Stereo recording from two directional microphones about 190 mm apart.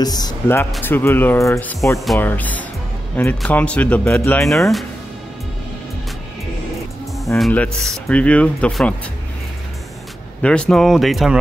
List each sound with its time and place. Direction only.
0.0 s speech: 20° left (ahead or behind)
2.0 s speech: centre (ahead or behind)
4.5 s speech: centre (ahead or behind)
7.3 s speech: 5° left (ahead or behind)
10.4 s speech: 5° left (ahead or behind)